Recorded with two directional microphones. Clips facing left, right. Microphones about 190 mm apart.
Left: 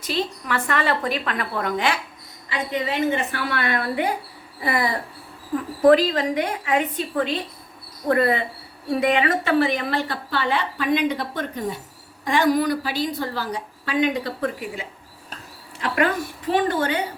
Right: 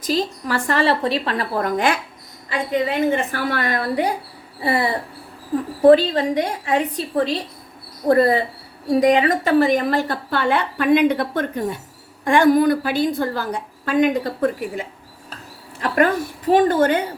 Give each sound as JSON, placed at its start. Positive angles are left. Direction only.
{"t": 0.0, "sound": "a woman's voice", "side_deg": -40}
{"t": 16.5, "sound": "a woman's voice", "side_deg": -45}